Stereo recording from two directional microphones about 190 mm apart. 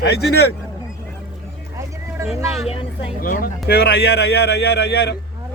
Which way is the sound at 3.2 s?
50° left (ahead or behind).